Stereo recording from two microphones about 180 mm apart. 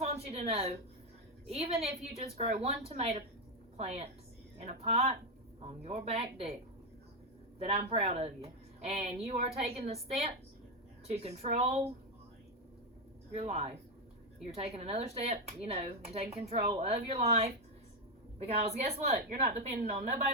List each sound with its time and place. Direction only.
0.0 s a sound: 35° right (ahead or behind)
1.5 s a woman's voice: 35° right (ahead or behind)
7.6 s a woman's voice: 35° right (ahead or behind)
13.3 s a woman's voice: 35° right (ahead or behind)